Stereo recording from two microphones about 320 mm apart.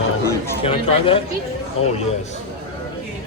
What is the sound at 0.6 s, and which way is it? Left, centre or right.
Speech, centre.